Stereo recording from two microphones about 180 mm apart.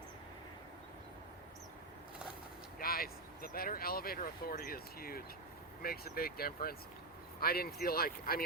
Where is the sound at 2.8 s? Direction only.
55° left (ahead or behind).